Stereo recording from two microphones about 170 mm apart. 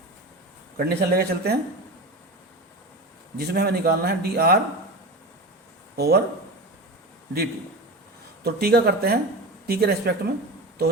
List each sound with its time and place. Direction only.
0.8 s speech: 65° right (ahead or behind)
3.3 s a man's voice: 70° right (ahead or behind)
6.0 s a man's voice: 70° right (ahead or behind)
8.4 s a man's voice: 70° right (ahead or behind)